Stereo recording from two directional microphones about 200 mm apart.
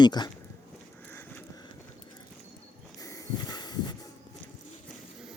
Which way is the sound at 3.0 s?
15° left (ahead or behind).